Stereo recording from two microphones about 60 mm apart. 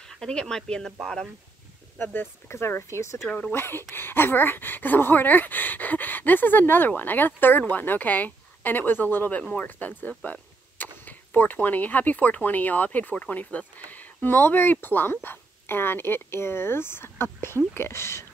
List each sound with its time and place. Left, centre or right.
0.1 s speech: centre
2.0 s speech: left
3.3 s speech: centre
3.5 s speech: left